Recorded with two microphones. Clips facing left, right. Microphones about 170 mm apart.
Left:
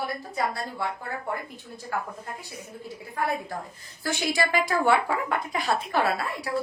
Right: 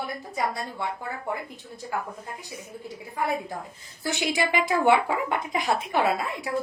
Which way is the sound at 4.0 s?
20° right (ahead or behind).